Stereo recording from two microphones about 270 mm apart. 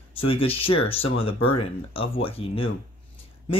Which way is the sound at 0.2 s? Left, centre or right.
Left.